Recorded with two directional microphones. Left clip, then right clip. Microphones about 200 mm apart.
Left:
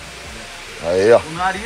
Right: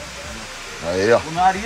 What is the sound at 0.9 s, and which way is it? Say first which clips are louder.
Speech: left 4 dB; 5° right (ahead or behind).